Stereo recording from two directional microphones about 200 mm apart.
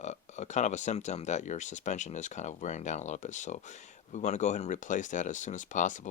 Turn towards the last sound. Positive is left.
turn(degrees=40)  # may be behind; listen again after turning